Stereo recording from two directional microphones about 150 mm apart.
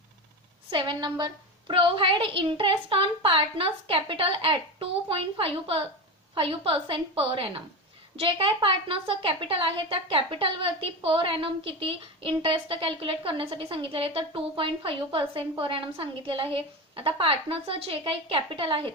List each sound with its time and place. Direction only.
0.7 s a woman's voice: 35° right (ahead or behind)